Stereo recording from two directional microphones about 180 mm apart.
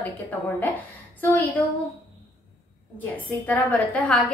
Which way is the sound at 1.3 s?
10° left (ahead or behind).